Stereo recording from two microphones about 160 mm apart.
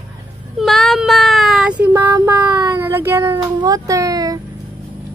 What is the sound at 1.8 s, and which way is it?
Child singing, 15° right (ahead or behind).